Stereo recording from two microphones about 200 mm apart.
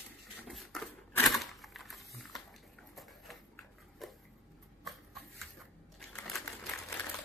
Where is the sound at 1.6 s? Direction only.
Centre (ahead or behind).